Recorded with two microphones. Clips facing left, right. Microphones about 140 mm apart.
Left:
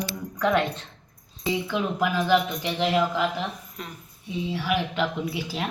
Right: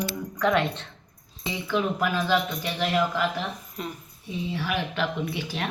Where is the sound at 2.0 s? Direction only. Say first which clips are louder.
Left 2 dB; 15° left (ahead or behind).